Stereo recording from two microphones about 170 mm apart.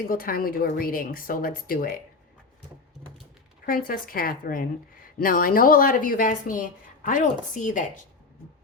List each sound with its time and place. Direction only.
0.0 s a woman's voice: 55° left (ahead or behind)
3.7 s a woman's voice: 55° left (ahead or behind)